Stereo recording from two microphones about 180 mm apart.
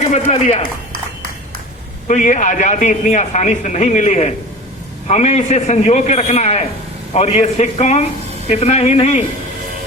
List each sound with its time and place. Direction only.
0.3 s a man's voice: 35° left (ahead or behind)
2.0 s a man's voice: 45° left (ahead or behind)